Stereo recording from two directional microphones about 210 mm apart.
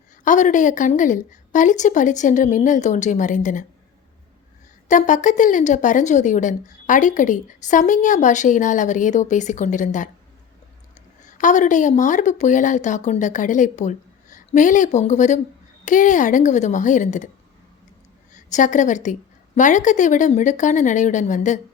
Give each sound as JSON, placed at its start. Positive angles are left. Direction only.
{"t": 0.3, "sound": "speech", "side_deg": 35}
{"t": 4.9, "sound": "speech", "side_deg": 35}
{"t": 11.3, "sound": "speech", "side_deg": 35}
{"t": 18.3, "sound": "a woman's voice", "side_deg": 35}